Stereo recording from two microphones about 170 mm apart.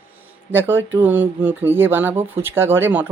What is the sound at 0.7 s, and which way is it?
Speech, 90° right.